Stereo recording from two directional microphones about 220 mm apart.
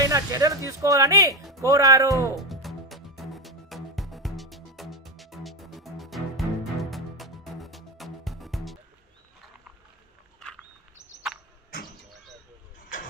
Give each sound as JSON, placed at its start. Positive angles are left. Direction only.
{"t": 0.0, "sound": "speech", "side_deg": -15}
{"t": 2.5, "sound": "music", "side_deg": 0}
{"t": 11.3, "sound": "a sound", "side_deg": 0}
{"t": 12.8, "sound": "vehicle", "side_deg": 40}